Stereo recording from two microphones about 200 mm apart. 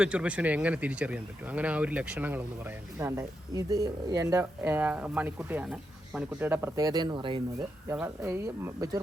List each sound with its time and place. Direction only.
0.0 s speech: 5° right (ahead or behind); by 7.4 s 25° right (ahead or behind)
7.9 s speech: 10° right (ahead or behind)